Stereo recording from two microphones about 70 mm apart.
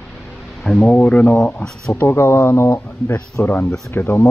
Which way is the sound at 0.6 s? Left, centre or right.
Centre.